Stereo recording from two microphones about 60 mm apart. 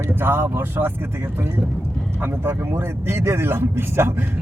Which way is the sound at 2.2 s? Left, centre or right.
Right.